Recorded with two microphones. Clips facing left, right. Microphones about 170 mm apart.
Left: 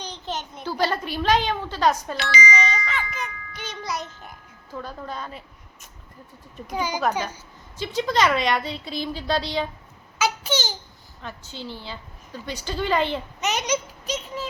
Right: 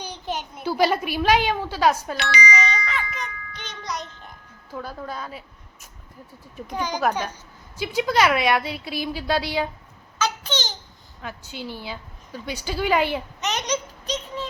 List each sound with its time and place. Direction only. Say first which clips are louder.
0.0 s a child's voice: right 1 dB; 10° right (ahead or behind)
2.1 s speech: even; 65° right (ahead or behind)
2.6 s music: even; 5° left (ahead or behind)
4.7 s a woman's voice: right 1 dB; 5° right (ahead or behind)
6.7 s a child's voice: left 1 dB; 5° left (ahead or behind)
7.8 s a woman's voice: right 1 dB; 10° right (ahead or behind)
10.2 s a sound: left 2 dB; 10° left (ahead or behind)
11.2 s a woman's voice: right 2 dB; 10° right (ahead or behind)
13.4 s a sound: left 3 dB; 5° left (ahead or behind)